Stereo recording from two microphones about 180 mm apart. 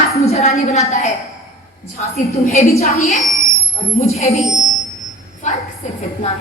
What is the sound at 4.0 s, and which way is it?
Speech, 35° left (ahead or behind).